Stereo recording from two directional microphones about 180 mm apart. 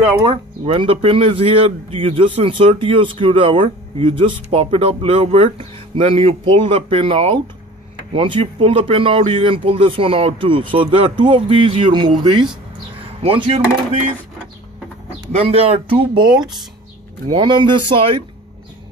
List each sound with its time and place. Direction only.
0.2 s speech: 25° right (ahead or behind)
15.3 s speech: 30° right (ahead or behind)